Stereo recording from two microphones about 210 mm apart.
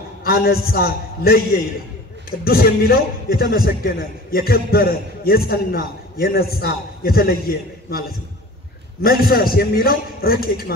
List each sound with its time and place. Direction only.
0.2 s a man's voice: 45° left (ahead or behind)
9.0 s a man's voice: 45° left (ahead or behind)